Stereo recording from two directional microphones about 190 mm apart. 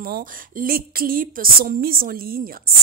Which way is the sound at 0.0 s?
50° right (ahead or behind).